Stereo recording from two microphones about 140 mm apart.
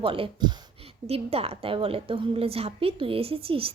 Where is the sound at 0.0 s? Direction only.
40° right (ahead or behind).